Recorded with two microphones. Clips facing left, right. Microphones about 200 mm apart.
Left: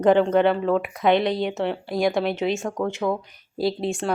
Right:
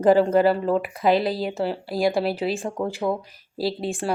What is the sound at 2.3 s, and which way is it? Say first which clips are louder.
Speech: left 1 dB; 35° right (ahead or behind).